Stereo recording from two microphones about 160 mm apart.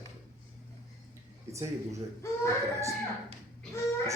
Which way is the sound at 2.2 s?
15° left (ahead or behind).